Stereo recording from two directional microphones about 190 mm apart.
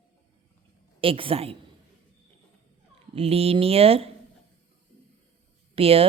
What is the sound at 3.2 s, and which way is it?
Speech, 30° right (ahead or behind).